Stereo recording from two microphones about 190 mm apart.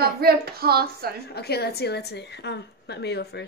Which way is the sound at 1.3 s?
55° left (ahead or behind).